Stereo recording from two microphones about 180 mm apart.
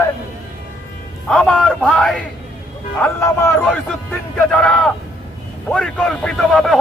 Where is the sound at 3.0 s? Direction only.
15° left (ahead or behind).